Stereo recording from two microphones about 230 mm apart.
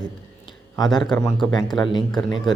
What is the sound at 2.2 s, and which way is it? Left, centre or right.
Music, centre.